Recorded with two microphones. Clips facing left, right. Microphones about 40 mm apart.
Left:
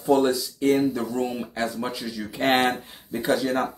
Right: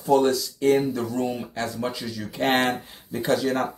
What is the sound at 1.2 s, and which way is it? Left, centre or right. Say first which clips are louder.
Speech: even; centre.